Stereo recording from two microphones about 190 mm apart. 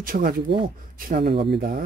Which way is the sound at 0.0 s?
50° right (ahead or behind).